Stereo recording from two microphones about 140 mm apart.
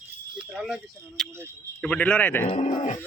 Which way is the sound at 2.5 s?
55° left (ahead or behind).